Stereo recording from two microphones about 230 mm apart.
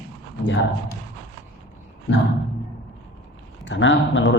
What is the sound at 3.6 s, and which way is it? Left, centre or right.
Speech, left.